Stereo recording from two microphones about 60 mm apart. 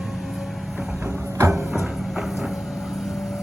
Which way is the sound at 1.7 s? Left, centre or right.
Centre.